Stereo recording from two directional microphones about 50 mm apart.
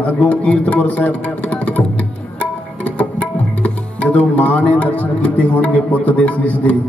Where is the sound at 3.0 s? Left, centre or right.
Left.